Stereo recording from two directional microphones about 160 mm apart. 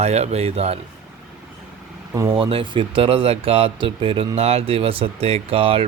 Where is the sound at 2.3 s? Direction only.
35° right (ahead or behind).